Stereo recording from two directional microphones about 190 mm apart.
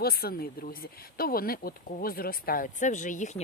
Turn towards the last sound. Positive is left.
turn(degrees=40)  # may be behind; listen again after turning